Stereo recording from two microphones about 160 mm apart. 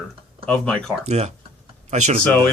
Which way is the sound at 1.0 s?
45° right (ahead or behind).